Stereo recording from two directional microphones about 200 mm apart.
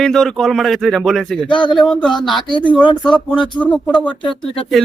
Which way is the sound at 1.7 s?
Centre (ahead or behind).